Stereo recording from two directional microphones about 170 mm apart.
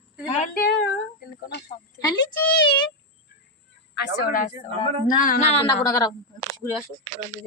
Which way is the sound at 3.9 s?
70° left (ahead or behind).